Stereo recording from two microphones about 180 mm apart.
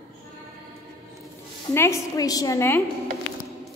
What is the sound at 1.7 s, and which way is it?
A woman's voice, 15° left (ahead or behind).